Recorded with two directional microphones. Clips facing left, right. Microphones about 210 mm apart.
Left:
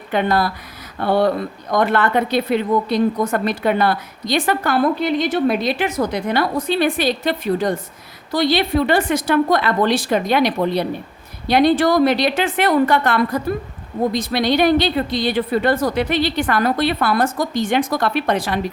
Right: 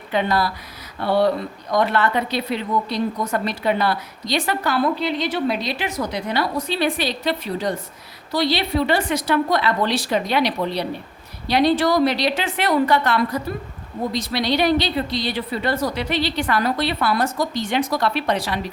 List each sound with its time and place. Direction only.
0.1 s a woman's voice: 50° left (ahead or behind)